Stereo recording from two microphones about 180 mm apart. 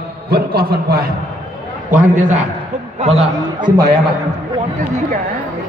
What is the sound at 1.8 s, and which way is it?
A man's voice, 45° right (ahead or behind).